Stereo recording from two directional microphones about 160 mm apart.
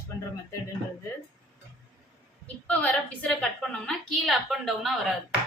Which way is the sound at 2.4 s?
10° left (ahead or behind).